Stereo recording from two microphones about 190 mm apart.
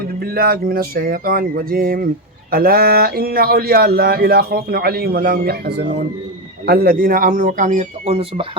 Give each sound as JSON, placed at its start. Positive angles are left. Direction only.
{"t": 0.2, "sound": "speech", "side_deg": -50}